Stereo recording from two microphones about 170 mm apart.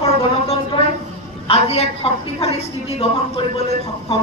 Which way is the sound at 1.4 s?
35° left (ahead or behind).